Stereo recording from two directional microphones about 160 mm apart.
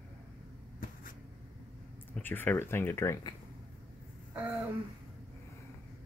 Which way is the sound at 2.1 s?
10° left (ahead or behind).